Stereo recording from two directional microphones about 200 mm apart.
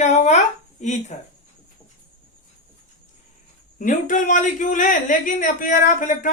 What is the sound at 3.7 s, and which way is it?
A man's voice, 40° left (ahead or behind).